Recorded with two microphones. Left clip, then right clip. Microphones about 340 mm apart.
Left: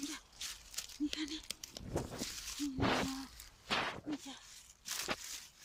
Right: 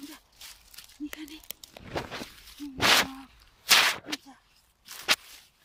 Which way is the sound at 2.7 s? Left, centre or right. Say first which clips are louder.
Right 14 dB; right.